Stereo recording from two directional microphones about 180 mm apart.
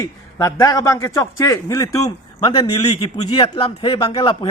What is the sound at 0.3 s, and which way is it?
A man's voice, 20° left (ahead or behind).